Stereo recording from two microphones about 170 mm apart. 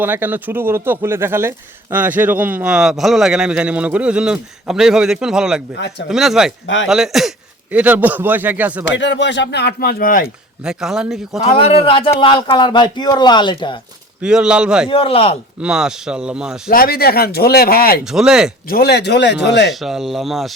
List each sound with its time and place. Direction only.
0.0 s a man's voice: 10° right (ahead or behind)
8.8 s speech: 90° left; by 10.2 s 55° left (ahead or behind)
10.6 s a man's voice: 5° right (ahead or behind)
11.4 s a man's voice: 35° left (ahead or behind)
14.2 s a man's voice: 5° right (ahead or behind)
14.8 s speech: 30° left (ahead or behind)
15.6 s a man's voice: 5° right (ahead or behind)
16.6 s speech: 60° left (ahead or behind)
18.0 s a man's voice: 5° right (ahead or behind)
18.7 s speech: 70° left (ahead or behind); by 19.7 s 90° left
19.8 s a man's voice: centre (ahead or behind)